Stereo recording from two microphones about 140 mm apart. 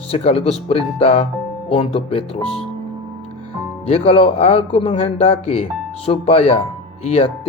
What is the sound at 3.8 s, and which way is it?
Speech, 45° left (ahead or behind).